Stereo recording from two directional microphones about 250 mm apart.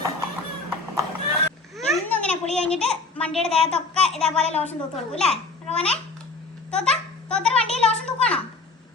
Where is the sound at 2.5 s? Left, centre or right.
Centre.